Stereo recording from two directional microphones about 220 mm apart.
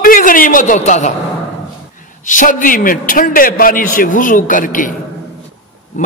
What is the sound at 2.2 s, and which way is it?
A man's voice, 35° left (ahead or behind).